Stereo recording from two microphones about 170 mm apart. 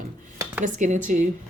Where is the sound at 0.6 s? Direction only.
45° right (ahead or behind).